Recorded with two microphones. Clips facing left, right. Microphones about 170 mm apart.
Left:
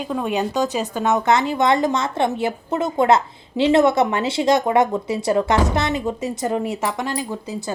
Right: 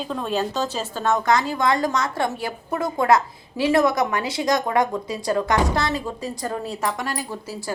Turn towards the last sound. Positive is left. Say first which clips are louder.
# left 4 dB
turn(degrees=20)  # may be behind; listen again after turning